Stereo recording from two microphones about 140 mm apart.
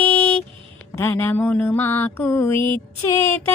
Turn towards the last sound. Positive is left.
turn(degrees=15)  # may be behind; listen again after turning